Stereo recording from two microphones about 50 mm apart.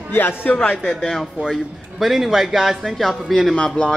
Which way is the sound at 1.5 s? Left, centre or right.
Centre.